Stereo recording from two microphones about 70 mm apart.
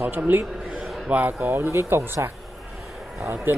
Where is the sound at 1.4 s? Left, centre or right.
Right.